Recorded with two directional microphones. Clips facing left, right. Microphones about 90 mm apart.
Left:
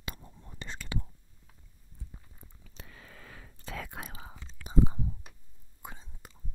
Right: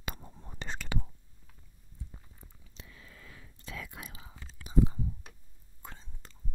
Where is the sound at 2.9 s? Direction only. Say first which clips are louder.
Left 3 dB; 60° left (ahead or behind).